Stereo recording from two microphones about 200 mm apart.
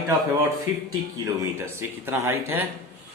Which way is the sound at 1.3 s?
15° right (ahead or behind).